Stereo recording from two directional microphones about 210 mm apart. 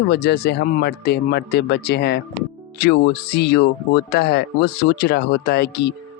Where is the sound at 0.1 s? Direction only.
50° left (ahead or behind).